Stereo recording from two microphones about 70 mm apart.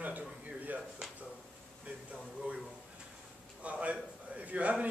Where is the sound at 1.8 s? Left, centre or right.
Centre.